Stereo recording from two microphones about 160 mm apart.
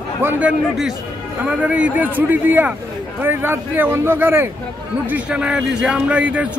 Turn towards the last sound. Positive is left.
turn(degrees=-10)  # may be behind; listen again after turning